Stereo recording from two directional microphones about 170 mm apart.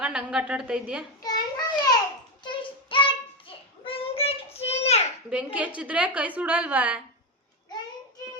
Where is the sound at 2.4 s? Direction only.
30° left (ahead or behind).